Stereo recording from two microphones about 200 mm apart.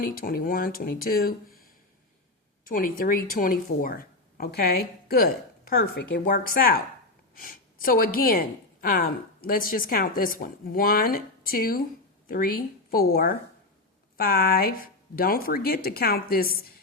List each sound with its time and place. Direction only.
0.0 s a woman's voice: 45° left (ahead or behind)